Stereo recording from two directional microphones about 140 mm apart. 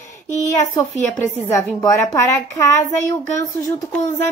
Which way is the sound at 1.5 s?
25° left (ahead or behind).